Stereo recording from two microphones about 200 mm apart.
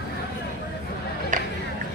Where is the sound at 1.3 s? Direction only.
40° right (ahead or behind).